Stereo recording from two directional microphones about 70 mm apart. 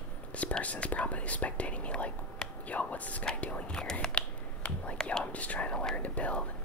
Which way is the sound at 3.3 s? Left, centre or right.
Centre.